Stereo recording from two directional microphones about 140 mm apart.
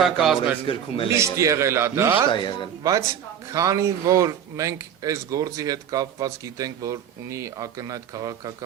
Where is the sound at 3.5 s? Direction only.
25° right (ahead or behind).